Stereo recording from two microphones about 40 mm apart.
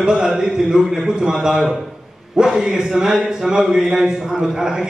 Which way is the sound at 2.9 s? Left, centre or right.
Centre.